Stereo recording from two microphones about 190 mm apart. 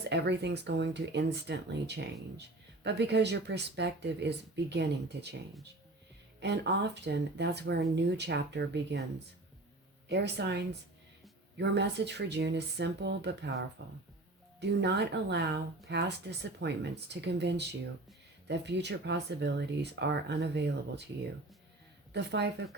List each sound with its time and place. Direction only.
0.1 s speech: 65° right (ahead or behind)
6.4 s speech: 65° right (ahead or behind)
22.1 s speech: 65° right (ahead or behind)